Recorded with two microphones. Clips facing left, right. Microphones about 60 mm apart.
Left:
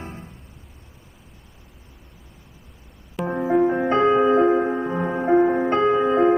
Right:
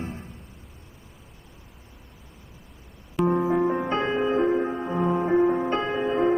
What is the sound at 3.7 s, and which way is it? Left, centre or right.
Music, left.